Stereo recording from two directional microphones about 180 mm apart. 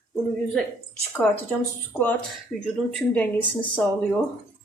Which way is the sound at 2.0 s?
10° left (ahead or behind).